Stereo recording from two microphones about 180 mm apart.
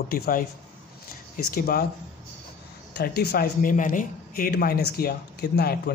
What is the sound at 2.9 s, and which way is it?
Speech, 60° left (ahead or behind).